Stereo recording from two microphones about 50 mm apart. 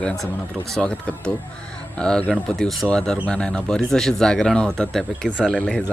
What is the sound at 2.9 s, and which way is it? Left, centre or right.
A man's voice, centre.